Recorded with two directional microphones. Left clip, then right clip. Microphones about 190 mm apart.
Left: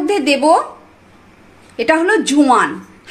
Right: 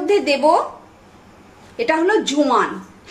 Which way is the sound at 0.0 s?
55° left (ahead or behind).